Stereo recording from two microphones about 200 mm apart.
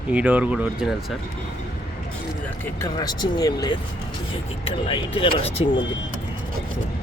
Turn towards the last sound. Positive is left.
turn(degrees=25)  # may be behind; listen again after turning